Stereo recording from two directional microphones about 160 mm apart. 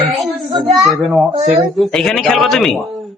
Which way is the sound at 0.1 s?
Centre (ahead or behind).